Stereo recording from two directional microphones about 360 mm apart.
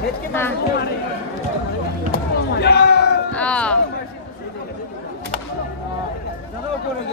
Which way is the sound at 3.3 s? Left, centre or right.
Centre.